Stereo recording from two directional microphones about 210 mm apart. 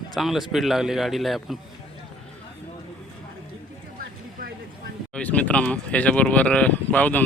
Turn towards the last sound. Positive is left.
turn(degrees=5)  # may be behind; listen again after turning